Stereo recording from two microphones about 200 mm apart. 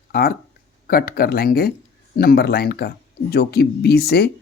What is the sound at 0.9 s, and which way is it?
Speech, 50° left (ahead or behind).